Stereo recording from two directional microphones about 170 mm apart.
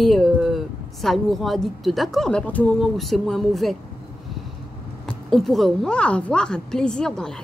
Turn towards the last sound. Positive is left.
turn(degrees=5)  # may be behind; listen again after turning